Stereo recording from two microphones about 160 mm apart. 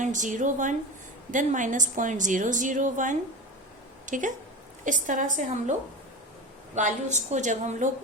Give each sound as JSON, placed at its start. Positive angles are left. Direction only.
{"t": 0.0, "sound": "a woman's voice", "side_deg": -50}
{"t": 6.7, "sound": "a woman's voice", "side_deg": -50}